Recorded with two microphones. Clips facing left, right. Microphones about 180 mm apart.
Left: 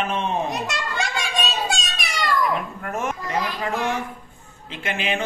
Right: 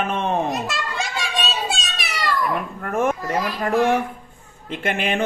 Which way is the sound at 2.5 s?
55° right (ahead or behind).